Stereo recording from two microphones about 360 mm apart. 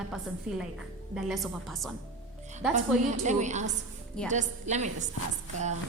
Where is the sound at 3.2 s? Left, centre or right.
Centre.